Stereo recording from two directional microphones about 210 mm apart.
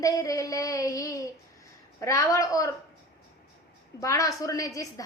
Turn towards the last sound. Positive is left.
turn(degrees=15)  # may be behind; listen again after turning